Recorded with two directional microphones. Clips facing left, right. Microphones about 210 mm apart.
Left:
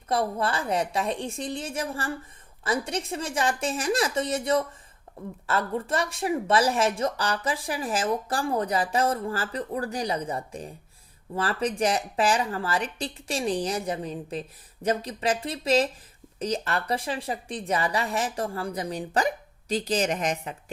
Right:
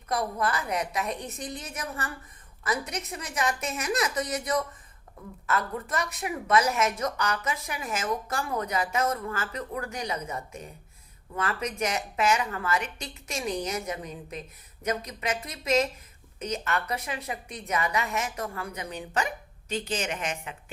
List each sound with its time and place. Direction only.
0.1 s a woman's voice: 30° left (ahead or behind)